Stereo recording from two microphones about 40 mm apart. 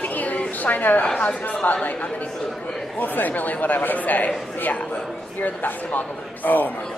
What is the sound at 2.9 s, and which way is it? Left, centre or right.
Speech, left.